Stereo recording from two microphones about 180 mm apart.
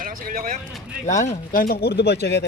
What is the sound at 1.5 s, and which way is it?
Speech, 55° left (ahead or behind).